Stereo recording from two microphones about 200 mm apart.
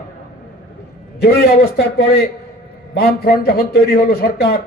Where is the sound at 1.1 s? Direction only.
50° left (ahead or behind).